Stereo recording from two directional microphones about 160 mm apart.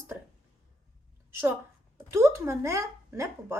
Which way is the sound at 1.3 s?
15° right (ahead or behind).